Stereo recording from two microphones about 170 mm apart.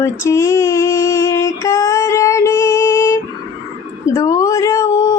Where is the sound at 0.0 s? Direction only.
15° left (ahead or behind).